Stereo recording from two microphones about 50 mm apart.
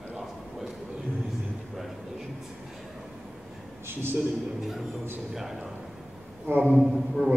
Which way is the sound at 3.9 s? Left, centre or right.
Right.